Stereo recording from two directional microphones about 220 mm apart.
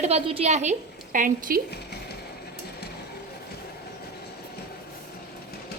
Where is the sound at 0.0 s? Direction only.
25° right (ahead or behind).